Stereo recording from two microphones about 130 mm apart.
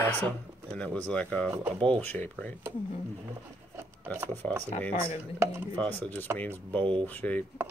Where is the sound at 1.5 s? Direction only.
15° right (ahead or behind).